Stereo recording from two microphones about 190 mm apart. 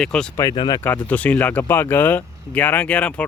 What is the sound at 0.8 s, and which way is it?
Speech, 10° left (ahead or behind).